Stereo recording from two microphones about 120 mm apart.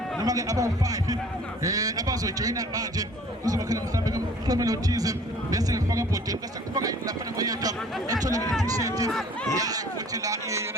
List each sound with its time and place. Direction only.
0.2 s a man's voice: 30° right (ahead or behind)
7.3 s a man's voice: 30° right (ahead or behind)